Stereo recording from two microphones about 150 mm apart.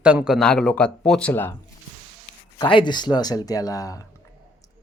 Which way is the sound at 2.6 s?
30° left (ahead or behind).